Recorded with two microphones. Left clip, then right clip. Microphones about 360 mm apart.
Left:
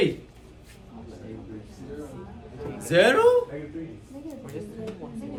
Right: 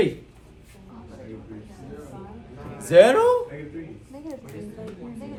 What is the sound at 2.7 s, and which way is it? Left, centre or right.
Speech, centre.